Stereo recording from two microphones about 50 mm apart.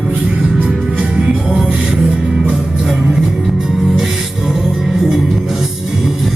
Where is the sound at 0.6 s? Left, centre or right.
Right.